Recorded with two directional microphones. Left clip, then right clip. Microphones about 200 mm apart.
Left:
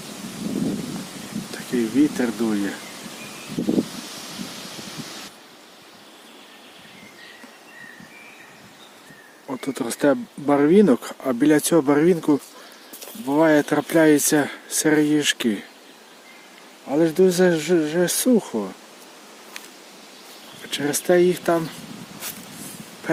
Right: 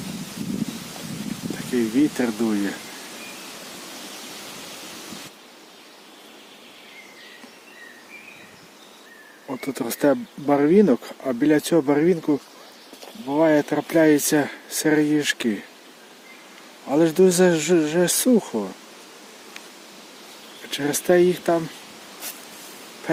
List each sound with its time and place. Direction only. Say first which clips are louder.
1.7 s speech: left 1 dB; centre (ahead or behind)
9.5 s speech: left 1 dB; 5° left (ahead or behind)
16.9 s speech: right 1 dB; 5° right (ahead or behind)
20.7 s speech: even; 5° left (ahead or behind)
23.1 s speech: left 1 dB; 10° left (ahead or behind)